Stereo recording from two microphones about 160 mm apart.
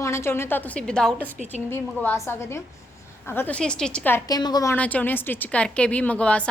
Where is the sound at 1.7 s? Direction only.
15° left (ahead or behind).